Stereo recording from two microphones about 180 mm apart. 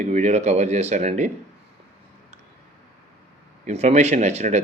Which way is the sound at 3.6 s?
40° right (ahead or behind).